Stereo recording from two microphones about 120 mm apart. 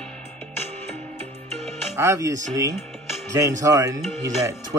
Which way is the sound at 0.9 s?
65° right (ahead or behind).